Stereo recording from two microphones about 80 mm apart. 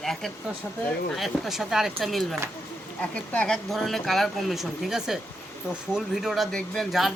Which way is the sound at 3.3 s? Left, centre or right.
Centre.